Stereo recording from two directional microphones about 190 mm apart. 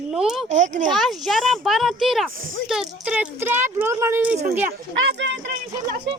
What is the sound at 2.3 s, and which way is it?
Speech, 45° right (ahead or behind).